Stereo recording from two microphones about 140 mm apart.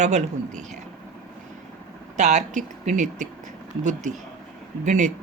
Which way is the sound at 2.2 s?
60° right (ahead or behind).